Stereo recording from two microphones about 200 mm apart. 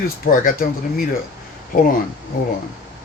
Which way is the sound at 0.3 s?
45° left (ahead or behind).